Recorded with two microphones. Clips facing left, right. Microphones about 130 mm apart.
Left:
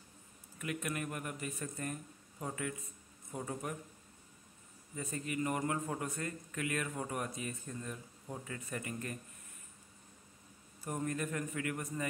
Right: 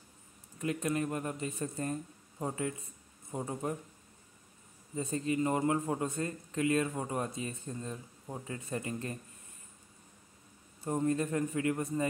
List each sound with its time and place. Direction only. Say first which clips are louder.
0.6 s a man's voice: right 7 dB; 30° right (ahead or behind)
4.9 s a man's voice: right 7 dB; 25° right (ahead or behind)
10.8 s a man's voice: right 7 dB; 25° right (ahead or behind)